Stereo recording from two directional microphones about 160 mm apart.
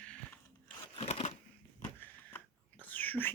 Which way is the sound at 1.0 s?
40° left (ahead or behind).